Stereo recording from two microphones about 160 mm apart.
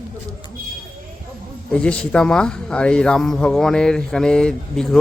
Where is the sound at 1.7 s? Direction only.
5° left (ahead or behind).